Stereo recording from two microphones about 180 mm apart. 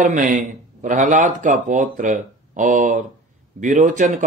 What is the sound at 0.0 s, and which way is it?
Speech, 45° right (ahead or behind).